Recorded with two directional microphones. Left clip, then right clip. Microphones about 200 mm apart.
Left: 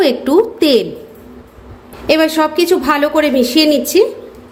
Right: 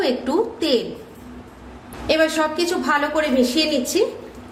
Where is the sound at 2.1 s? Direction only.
35° left (ahead or behind).